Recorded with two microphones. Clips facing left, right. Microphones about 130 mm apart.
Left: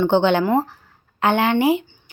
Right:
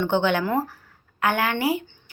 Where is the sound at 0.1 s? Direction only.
25° left (ahead or behind).